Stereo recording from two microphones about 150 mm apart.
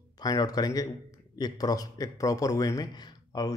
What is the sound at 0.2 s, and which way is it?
A man's voice, 25° left (ahead or behind).